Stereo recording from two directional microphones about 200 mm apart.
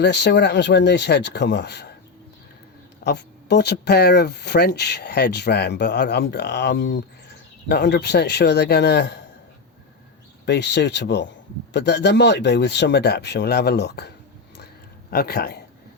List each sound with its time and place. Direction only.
0.0 s speech: 55° left (ahead or behind)
3.0 s speech: 55° left (ahead or behind)
10.4 s speech: 55° left (ahead or behind)
15.1 s speech: 50° left (ahead or behind)